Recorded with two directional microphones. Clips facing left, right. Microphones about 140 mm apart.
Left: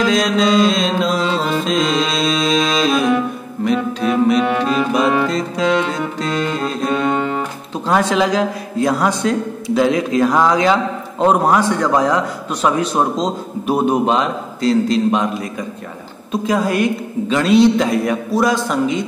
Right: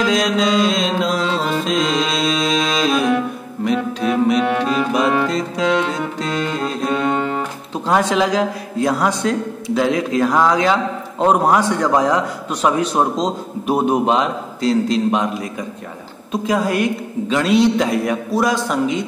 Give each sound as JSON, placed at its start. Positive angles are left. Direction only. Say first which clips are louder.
{"t": 0.0, "sound": "a man's voice", "louder": "left 2 dB", "side_deg": -15}
{"t": 0.7, "sound": "mantra", "louder": "left 2 dB", "side_deg": -15}
{"t": 1.4, "sound": "music", "louder": "left 1 dB", "side_deg": -5}
{"t": 6.9, "sound": "music", "louder": "left 1 dB", "side_deg": -5}
{"t": 7.9, "sound": "a man's voice", "louder": "left 1 dB", "side_deg": -5}
{"t": 11.2, "sound": "a man's voice", "louder": "left 1 dB", "side_deg": -10}
{"t": 16.4, "sound": "a man's voice", "louder": "left 1 dB", "side_deg": -5}